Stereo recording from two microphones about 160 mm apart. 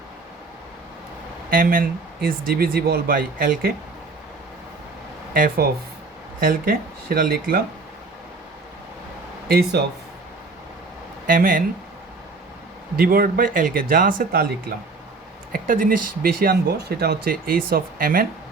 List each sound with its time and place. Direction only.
1.5 s speech: 60° right (ahead or behind)
5.3 s speech: 60° right (ahead or behind)
9.5 s speech: 75° right (ahead or behind)
11.3 s speech: 60° right (ahead or behind)
13.0 s speech: 65° right (ahead or behind)
15.5 s speech: 60° right (ahead or behind)